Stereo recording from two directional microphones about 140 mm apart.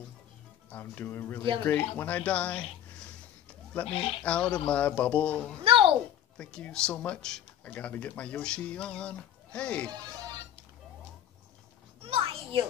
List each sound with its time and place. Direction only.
0.7 s speech: 15° left (ahead or behind)
3.9 s speech: 40° left (ahead or behind)
4.2 s speech: 10° left (ahead or behind)
5.6 s a sound: 40° right (ahead or behind)
6.3 s speech: 10° left (ahead or behind)
12.0 s children playing: 40° right (ahead or behind)